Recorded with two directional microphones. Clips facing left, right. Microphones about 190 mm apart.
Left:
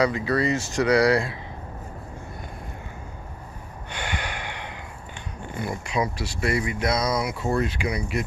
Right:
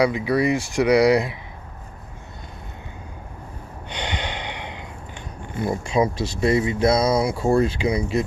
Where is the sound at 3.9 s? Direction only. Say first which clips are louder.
Right 3 dB; 20° right (ahead or behind).